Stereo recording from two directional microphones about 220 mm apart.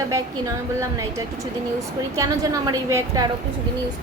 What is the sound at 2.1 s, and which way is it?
A woman's voice, 15° right (ahead or behind).